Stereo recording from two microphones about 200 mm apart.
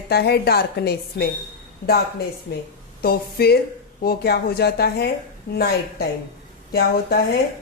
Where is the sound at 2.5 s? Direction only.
50° left (ahead or behind).